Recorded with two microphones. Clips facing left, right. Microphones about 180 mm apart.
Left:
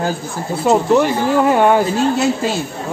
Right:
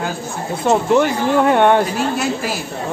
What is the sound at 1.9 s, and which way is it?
Speech, 25° left (ahead or behind).